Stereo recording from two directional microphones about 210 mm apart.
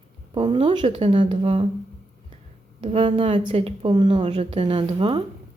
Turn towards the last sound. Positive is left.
turn(degrees=-25)  # may be behind; listen again after turning